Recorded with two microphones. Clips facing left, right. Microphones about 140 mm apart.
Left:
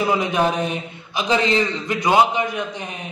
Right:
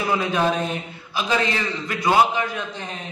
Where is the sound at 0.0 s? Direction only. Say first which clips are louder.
Left 2 dB; 15° left (ahead or behind).